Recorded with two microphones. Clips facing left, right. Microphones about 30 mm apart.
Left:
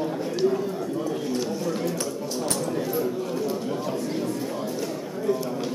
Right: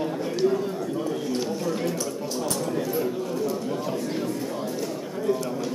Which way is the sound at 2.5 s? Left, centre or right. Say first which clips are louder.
Even; centre.